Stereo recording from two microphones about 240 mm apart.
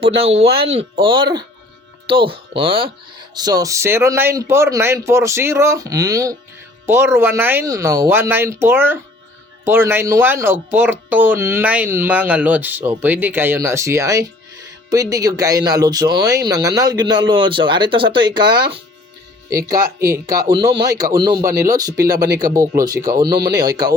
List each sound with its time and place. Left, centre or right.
0.0 s speech: right
23.3 s speech: right
23.6 s speech: centre